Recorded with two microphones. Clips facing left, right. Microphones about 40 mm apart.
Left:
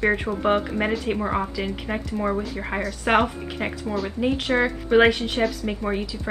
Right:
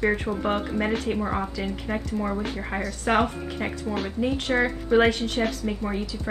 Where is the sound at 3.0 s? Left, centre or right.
Left.